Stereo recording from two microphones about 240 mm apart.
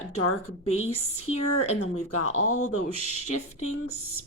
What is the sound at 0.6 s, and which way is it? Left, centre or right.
Speech, left.